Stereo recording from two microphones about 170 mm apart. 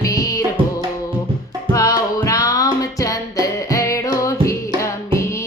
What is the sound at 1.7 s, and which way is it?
Music, 20° left (ahead or behind).